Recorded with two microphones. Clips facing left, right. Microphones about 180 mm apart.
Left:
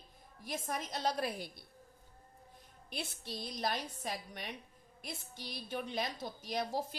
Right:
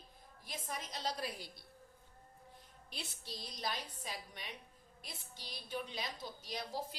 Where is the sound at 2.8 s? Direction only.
60° left (ahead or behind).